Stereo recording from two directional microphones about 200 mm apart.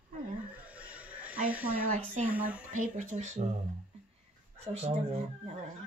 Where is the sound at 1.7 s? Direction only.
45° right (ahead or behind).